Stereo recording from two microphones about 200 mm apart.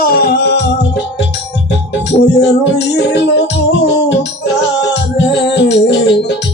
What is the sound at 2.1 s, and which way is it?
Music, 30° left (ahead or behind).